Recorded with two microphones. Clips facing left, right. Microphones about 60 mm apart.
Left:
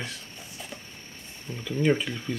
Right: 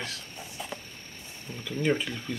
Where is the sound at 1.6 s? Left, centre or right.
Centre.